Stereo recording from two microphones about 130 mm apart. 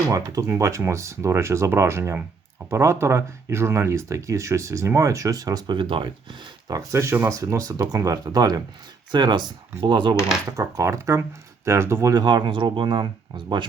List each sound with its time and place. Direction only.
0.3 s speech: 25° right (ahead or behind)
6.7 s speech: 25° right (ahead or behind)
9.1 s coin: 35° right (ahead or behind)
10.6 s speech: 25° right (ahead or behind)